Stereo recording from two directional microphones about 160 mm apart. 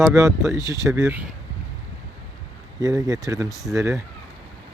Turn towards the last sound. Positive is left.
turn(degrees=-20)  # may be behind; listen again after turning